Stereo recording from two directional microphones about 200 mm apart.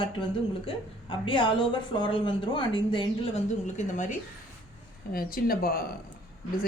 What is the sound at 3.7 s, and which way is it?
Speech, 40° left (ahead or behind).